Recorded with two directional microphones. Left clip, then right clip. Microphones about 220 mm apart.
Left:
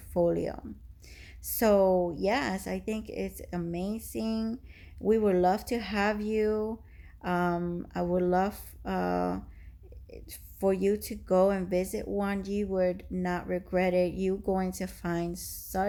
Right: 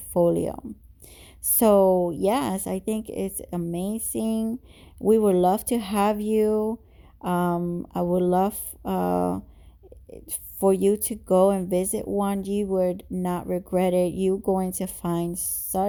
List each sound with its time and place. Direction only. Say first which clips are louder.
0.1 s speech: right 6 dB; 35° right (ahead or behind)